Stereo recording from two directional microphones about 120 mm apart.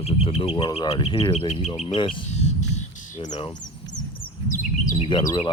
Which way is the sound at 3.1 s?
70° left (ahead or behind).